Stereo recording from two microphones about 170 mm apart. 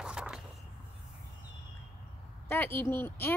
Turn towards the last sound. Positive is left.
turn(degrees=15)  # may be behind; listen again after turning